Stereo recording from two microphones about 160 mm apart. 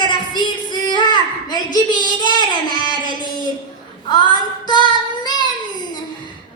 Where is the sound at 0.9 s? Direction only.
30° left (ahead or behind).